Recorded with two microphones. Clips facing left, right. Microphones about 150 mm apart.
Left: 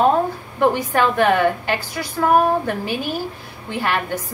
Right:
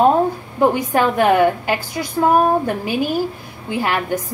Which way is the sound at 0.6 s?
15° right (ahead or behind).